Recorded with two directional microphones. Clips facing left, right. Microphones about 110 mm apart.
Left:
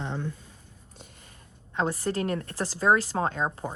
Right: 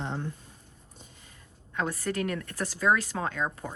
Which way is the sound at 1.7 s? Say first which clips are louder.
Left 3 dB; 30° left (ahead or behind).